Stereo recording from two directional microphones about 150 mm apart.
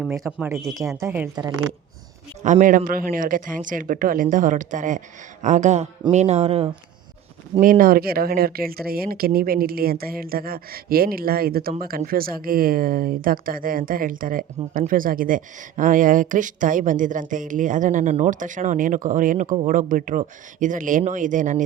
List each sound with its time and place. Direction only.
0.3 s speech: 10° right (ahead or behind)
2.4 s speech: 55° right (ahead or behind)
7.6 s a woman's voice: 70° right (ahead or behind)